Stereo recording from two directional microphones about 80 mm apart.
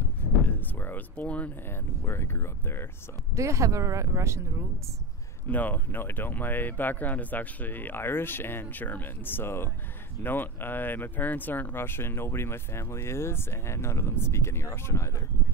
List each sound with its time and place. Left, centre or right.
0.2 s a sound: left
2.0 s speech: left
3.3 s speech: right
5.5 s speech: left